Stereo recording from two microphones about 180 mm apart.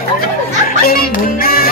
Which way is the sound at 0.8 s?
55° left (ahead or behind).